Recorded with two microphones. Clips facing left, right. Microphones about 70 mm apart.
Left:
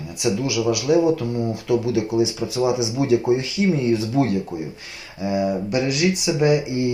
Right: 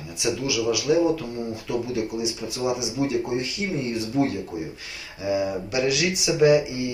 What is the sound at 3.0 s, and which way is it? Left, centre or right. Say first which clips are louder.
Speech: left 6 dB; left.